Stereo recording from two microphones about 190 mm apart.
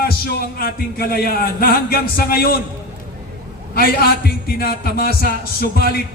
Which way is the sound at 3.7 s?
55° left (ahead or behind).